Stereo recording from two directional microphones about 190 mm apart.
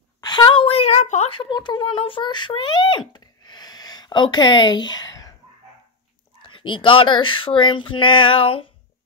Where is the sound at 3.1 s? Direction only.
20° left (ahead or behind).